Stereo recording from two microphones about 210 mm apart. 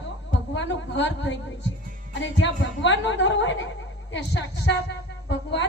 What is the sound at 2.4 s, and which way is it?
A woman's voice, 55° left (ahead or behind).